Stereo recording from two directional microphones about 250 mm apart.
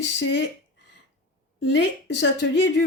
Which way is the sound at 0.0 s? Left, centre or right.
Left.